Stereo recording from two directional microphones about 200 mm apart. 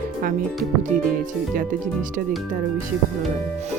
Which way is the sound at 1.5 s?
40° right (ahead or behind).